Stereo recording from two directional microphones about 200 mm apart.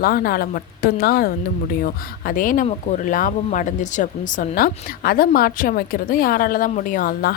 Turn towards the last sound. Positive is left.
turn(degrees=45)  # may be behind; listen again after turning